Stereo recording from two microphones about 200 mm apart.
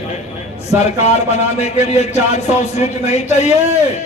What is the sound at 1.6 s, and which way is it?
Speech, 30° left (ahead or behind).